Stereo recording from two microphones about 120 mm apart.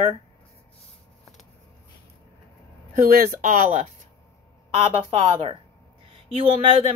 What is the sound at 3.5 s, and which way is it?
Speech, 90° right.